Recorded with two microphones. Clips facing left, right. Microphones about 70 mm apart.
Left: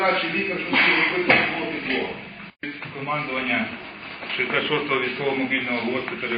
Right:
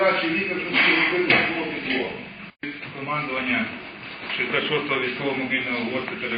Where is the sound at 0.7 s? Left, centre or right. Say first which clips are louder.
Even; left.